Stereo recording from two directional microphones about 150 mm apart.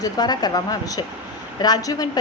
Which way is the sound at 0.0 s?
25° left (ahead or behind).